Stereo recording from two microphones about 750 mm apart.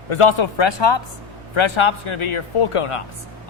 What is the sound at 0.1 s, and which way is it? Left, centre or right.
Speech, left.